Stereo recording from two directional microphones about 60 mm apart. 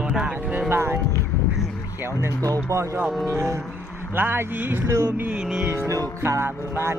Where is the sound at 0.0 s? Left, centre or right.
Centre.